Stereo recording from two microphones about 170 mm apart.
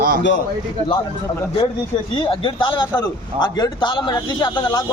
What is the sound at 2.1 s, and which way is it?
A man's voice, 30° left (ahead or behind).